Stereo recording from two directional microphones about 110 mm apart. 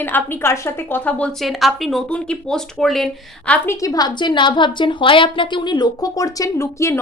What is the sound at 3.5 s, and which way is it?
A woman's voice, 25° left (ahead or behind).